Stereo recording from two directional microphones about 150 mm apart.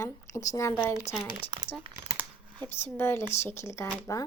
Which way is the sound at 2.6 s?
15° left (ahead or behind).